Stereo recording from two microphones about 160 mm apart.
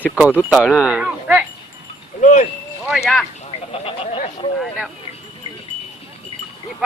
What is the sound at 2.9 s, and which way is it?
Speech, centre (ahead or behind).